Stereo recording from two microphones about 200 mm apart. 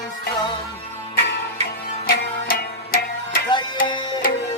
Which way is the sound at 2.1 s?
50° left (ahead or behind).